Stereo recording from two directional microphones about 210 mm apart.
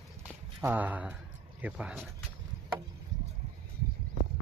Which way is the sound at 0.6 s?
10° right (ahead or behind).